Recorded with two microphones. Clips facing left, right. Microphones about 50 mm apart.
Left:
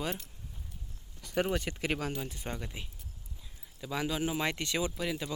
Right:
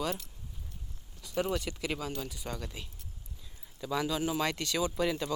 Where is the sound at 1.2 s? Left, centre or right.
Left.